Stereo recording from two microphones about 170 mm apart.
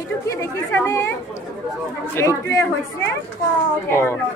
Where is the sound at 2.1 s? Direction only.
15° left (ahead or behind).